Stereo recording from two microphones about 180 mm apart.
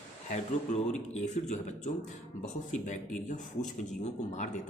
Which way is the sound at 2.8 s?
45° left (ahead or behind).